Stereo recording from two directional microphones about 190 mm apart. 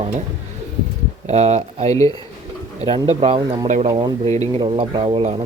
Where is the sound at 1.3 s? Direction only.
35° right (ahead or behind).